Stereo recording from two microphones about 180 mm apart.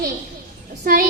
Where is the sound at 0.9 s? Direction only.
55° right (ahead or behind).